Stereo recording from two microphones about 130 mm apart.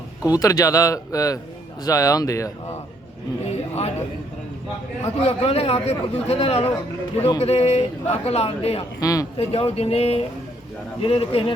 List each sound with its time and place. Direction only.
0.3 s speech: 30° left (ahead or behind)
3.4 s a sound: 55° left (ahead or behind)
5.0 s a man's voice: 55° left (ahead or behind)
9.0 s speech: 25° left (ahead or behind)
9.4 s a man's voice: 50° left (ahead or behind)